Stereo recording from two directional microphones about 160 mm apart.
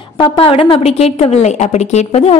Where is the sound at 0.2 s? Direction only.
35° left (ahead or behind).